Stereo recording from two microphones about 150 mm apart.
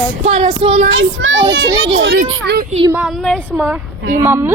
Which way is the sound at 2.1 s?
90° right.